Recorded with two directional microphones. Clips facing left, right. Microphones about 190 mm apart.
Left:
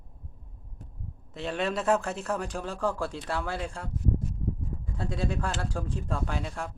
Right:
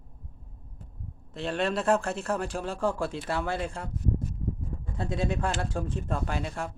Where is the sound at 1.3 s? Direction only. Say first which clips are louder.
Right 1 dB; centre (ahead or behind).